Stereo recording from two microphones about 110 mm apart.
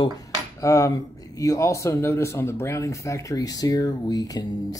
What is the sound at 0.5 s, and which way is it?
Speech, 30° left (ahead or behind).